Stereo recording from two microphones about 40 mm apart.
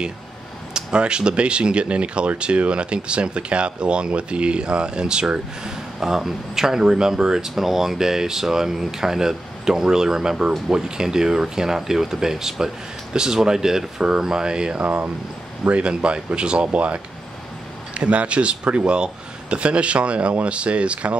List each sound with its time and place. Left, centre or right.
0.7 s speech: right
14.8 s speech: right